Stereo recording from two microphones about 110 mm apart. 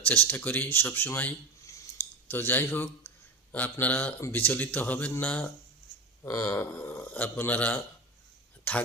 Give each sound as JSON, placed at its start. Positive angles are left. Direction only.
{"t": 0.0, "sound": "speech", "side_deg": 15}
{"t": 2.0, "sound": "a sound", "side_deg": 20}
{"t": 2.3, "sound": "a man's voice", "side_deg": 20}
{"t": 6.2, "sound": "speech", "side_deg": 25}